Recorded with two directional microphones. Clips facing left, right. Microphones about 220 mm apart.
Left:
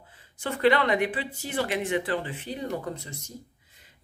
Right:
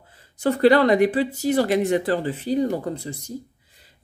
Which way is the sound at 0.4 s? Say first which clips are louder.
Right 7 dB; 35° right (ahead or behind).